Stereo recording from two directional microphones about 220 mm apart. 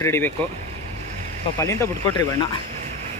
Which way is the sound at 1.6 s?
10° left (ahead or behind).